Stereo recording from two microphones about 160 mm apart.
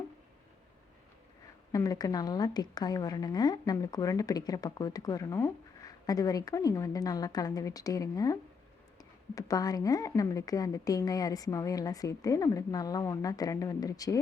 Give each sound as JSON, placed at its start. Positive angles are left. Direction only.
{"t": 1.7, "sound": "a woman's voice", "side_deg": 20}